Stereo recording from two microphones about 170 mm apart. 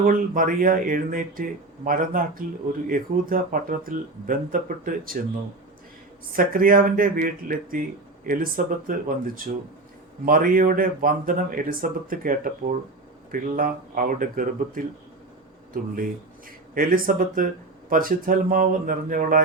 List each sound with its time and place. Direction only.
0.0 s speech: 55° right (ahead or behind)
6.3 s speech: 55° right (ahead or behind)
16.7 s speech: 55° right (ahead or behind)